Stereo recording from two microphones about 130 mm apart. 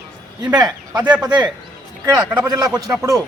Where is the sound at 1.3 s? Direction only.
35° right (ahead or behind).